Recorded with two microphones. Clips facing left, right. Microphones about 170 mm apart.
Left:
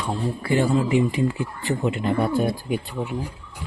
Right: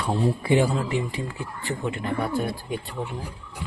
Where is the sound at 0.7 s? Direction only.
10° left (ahead or behind).